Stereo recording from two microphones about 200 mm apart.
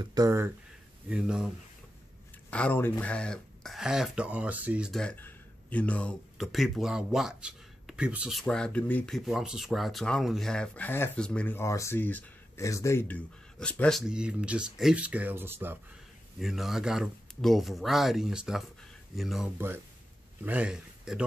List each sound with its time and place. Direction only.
0.0 s speech: 20° right (ahead or behind)
1.1 s speech: 5° right (ahead or behind)
2.5 s speech: 10° left (ahead or behind)